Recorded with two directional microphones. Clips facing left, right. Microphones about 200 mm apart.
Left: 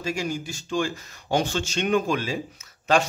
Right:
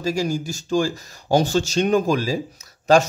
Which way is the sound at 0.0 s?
35° right (ahead or behind).